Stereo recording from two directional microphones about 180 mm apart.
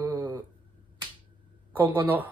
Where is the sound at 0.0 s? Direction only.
20° right (ahead or behind).